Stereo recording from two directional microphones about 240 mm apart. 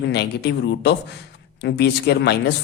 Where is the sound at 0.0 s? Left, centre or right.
Left.